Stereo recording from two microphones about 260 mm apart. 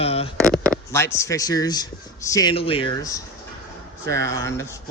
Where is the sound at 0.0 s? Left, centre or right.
Left.